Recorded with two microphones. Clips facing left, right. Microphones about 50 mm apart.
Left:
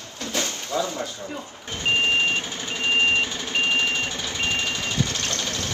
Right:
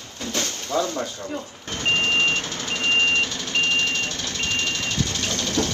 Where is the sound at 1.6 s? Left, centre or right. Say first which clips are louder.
Even; centre.